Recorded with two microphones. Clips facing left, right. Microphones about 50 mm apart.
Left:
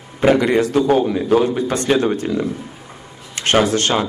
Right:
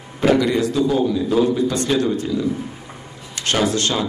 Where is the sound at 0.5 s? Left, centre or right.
Left.